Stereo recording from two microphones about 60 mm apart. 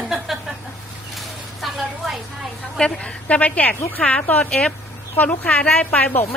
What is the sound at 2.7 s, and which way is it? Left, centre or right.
A woman's voice, centre.